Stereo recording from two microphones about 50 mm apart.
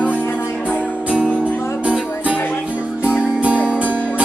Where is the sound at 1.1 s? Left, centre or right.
Right.